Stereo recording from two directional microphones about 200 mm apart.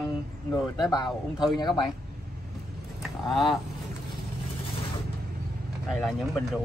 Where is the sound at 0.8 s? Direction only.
20° left (ahead or behind).